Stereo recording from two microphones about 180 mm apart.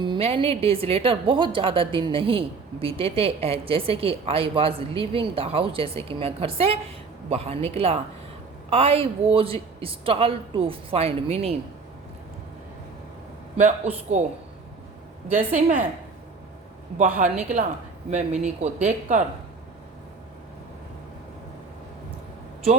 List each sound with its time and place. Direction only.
0.0 s a woman's voice: 30° right (ahead or behind)
13.6 s a woman's voice: 40° right (ahead or behind)
17.2 s a woman's voice: 45° right (ahead or behind)